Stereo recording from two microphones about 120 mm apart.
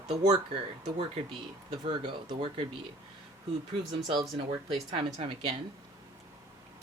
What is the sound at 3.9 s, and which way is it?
Speech, 40° right (ahead or behind).